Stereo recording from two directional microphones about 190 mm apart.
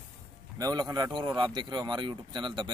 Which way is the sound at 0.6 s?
20° right (ahead or behind).